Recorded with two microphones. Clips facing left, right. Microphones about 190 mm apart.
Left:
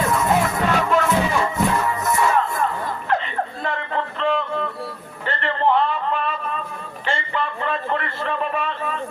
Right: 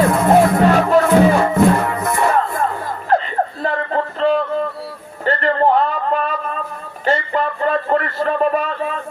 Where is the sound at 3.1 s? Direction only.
40° right (ahead or behind).